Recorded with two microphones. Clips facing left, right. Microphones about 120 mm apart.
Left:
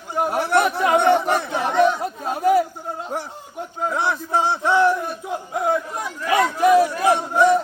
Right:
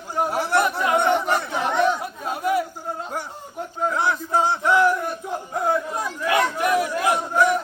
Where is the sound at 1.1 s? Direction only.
10° left (ahead or behind).